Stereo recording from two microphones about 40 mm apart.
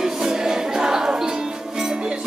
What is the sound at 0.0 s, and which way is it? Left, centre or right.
Choir, centre.